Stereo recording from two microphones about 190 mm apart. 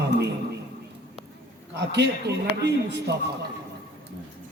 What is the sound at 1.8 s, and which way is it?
A man's voice, 60° right (ahead or behind).